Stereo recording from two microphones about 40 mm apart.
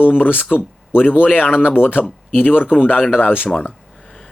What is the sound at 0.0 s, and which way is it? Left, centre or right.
Speech, left.